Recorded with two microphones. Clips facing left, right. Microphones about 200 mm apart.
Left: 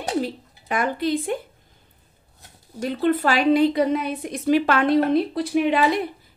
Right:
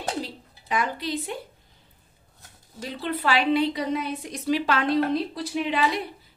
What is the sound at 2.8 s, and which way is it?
A woman's voice, 50° left (ahead or behind).